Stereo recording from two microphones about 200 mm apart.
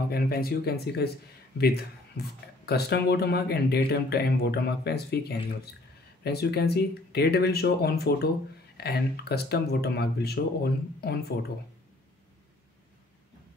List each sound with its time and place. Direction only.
0.1 s speech: 50° left (ahead or behind)